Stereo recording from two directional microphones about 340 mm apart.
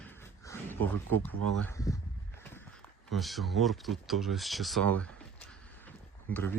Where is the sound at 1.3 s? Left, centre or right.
Right.